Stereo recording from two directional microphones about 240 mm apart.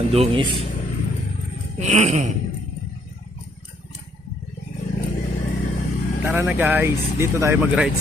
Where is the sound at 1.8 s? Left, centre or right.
Right.